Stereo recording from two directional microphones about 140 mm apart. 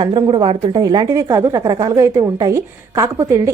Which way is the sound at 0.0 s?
35° right (ahead or behind).